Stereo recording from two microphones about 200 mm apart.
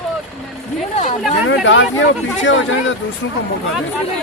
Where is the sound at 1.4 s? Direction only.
70° left (ahead or behind).